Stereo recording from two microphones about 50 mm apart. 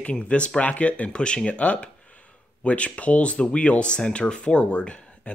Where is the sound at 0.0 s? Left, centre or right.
Left.